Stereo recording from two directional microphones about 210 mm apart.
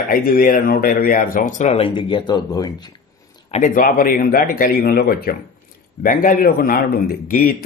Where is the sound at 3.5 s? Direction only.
35° left (ahead or behind).